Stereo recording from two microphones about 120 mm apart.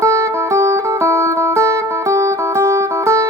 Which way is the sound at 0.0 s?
25° right (ahead or behind).